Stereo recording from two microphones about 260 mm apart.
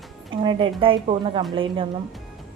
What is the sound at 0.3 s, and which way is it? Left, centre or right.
A woman's voice, centre.